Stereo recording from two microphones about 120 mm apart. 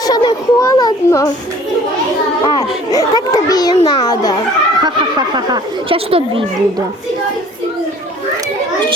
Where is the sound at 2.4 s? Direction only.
35° left (ahead or behind).